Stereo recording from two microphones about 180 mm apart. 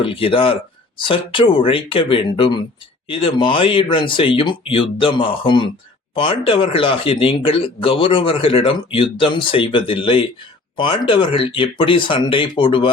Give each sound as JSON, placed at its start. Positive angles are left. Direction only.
{"t": 0.0, "sound": "speech", "side_deg": 30}